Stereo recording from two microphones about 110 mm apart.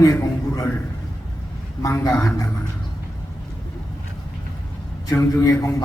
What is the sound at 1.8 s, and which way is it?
Speech, 30° left (ahead or behind).